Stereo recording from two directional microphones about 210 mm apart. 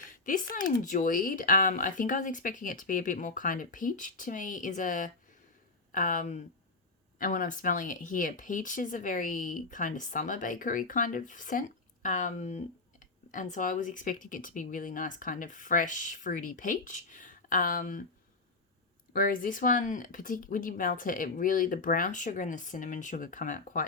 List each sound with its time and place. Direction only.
0.3 s speech: 40° left (ahead or behind)
19.1 s speech: 45° left (ahead or behind)